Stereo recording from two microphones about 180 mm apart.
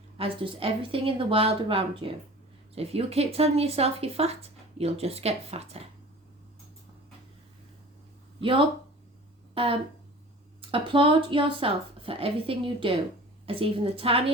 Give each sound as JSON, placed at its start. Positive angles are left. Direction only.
{"t": 0.2, "sound": "speech", "side_deg": -30}
{"t": 8.4, "sound": "speech", "side_deg": -30}
{"t": 10.6, "sound": "speech", "side_deg": -30}